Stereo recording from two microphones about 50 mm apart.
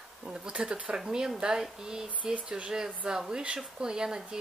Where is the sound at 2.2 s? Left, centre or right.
Right.